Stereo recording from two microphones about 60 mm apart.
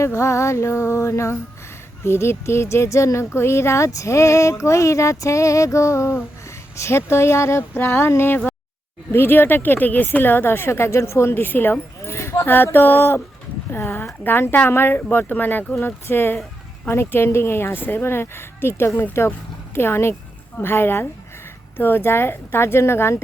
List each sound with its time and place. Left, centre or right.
0.0 s speech: left
12.5 s speech: left
14.3 s speech: left